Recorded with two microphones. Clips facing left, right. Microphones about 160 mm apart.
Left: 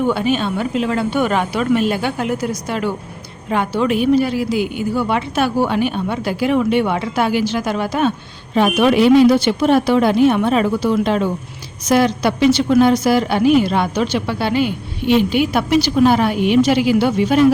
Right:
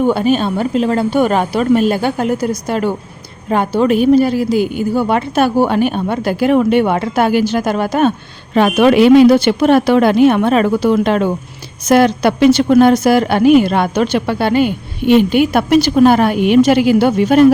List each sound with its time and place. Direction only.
0.0 s a woman's voice: 40° right (ahead or behind)
8.5 s a woman's voice: 70° right (ahead or behind); by 17.4 s 50° right (ahead or behind)